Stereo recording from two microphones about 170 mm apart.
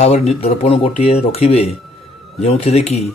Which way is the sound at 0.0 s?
35° left (ahead or behind).